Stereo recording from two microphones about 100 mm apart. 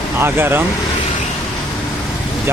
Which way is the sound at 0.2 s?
20° right (ahead or behind).